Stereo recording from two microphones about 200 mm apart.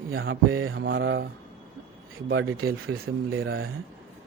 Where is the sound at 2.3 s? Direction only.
80° right.